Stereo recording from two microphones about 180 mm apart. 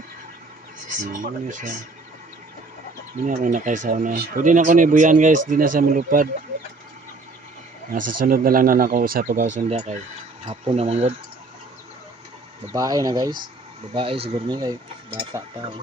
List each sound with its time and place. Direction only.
1.1 s speech: 45° right (ahead or behind)
3.2 s speech: 45° right (ahead or behind)
8.2 s speech: 50° right (ahead or behind); by 11.1 s 35° right (ahead or behind)
12.7 s speech: 20° right (ahead or behind)